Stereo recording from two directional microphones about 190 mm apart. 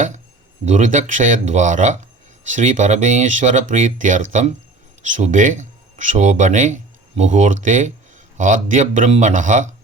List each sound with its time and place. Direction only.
0.6 s speech: 40° right (ahead or behind)